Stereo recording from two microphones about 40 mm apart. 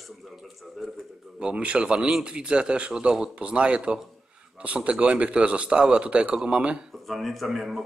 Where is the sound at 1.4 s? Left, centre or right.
Right.